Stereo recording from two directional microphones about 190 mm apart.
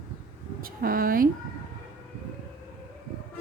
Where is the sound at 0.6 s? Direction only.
50° right (ahead or behind).